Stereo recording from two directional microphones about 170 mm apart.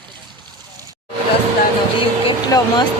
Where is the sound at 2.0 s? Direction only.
30° left (ahead or behind).